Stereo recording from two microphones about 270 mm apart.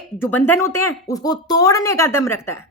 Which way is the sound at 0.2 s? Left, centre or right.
Centre.